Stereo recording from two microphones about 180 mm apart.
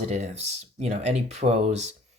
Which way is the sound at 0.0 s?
40° right (ahead or behind).